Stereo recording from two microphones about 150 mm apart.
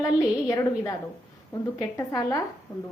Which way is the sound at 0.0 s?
20° left (ahead or behind).